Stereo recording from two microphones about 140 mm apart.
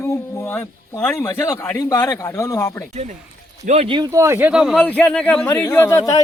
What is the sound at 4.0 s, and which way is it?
Speech, 25° right (ahead or behind).